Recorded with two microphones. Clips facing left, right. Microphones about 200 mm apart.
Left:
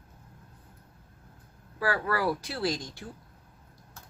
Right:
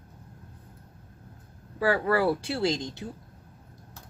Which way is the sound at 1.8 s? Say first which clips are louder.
Right 5 dB; 25° right (ahead or behind).